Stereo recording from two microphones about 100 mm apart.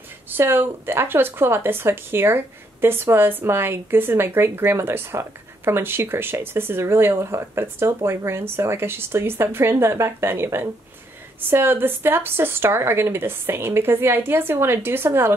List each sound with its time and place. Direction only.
0.3 s speech: 20° right (ahead or behind)